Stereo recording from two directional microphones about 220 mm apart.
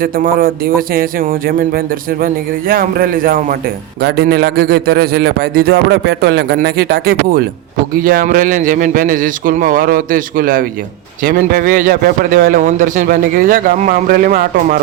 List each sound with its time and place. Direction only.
0.0 s a man's voice: 40° right (ahead or behind)